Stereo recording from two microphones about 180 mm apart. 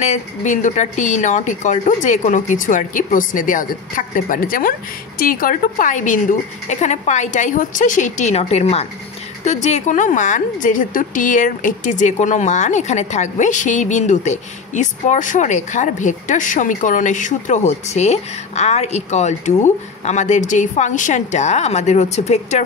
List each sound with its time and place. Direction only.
0.0 s speech: 40° left (ahead or behind)